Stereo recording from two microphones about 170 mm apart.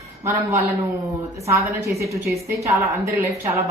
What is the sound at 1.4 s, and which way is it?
A woman's voice, 15° right (ahead or behind).